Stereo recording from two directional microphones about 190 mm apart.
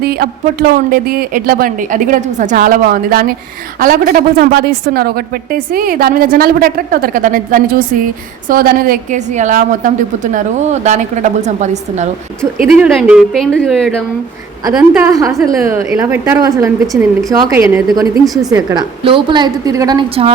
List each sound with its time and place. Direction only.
0.0 s a woman's voice: 55° right (ahead or behind); by 12.0 s 35° right (ahead or behind)
12.6 s a woman's voice: 5° right (ahead or behind)
15.1 s a woman's voice: 15° right (ahead or behind)